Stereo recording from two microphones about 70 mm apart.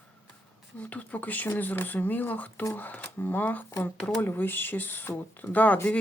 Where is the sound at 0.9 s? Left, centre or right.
Left.